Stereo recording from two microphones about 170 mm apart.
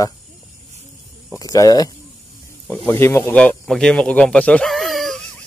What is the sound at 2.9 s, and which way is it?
Speech, 15° left (ahead or behind).